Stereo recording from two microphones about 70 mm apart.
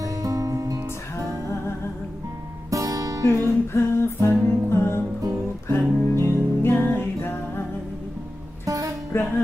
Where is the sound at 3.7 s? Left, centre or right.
Left.